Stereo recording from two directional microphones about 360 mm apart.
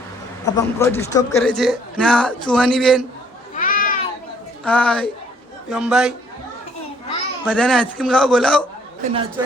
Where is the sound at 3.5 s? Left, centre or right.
Left.